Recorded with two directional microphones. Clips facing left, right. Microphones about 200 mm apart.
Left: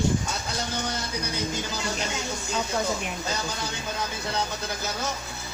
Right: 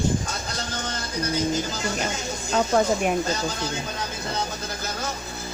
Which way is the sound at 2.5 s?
55° right (ahead or behind).